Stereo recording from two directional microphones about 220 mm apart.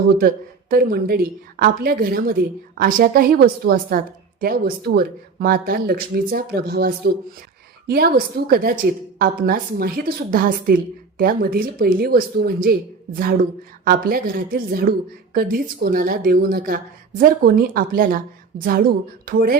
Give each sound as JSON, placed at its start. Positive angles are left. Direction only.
{"t": 0.2, "sound": "a woman's voice", "side_deg": -40}
{"t": 13.8, "sound": "a woman's voice", "side_deg": -45}